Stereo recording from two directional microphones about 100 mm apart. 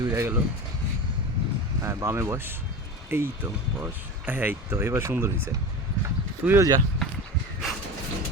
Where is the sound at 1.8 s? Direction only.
30° right (ahead or behind).